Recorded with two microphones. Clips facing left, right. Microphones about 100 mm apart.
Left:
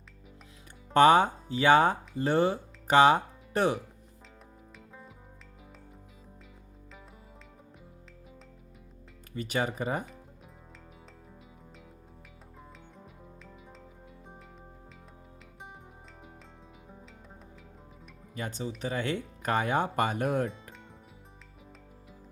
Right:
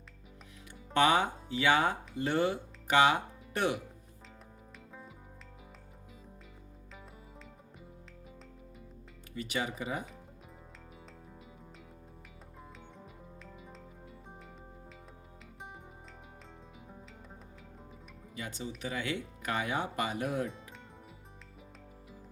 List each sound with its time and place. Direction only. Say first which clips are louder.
0.9 s speech: left 7 dB; 40° left (ahead or behind)
9.3 s speech: left 5 dB; 40° left (ahead or behind)
18.3 s speech: left 5 dB; 40° left (ahead or behind)